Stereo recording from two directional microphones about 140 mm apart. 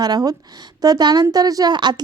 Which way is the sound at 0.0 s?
30° right (ahead or behind).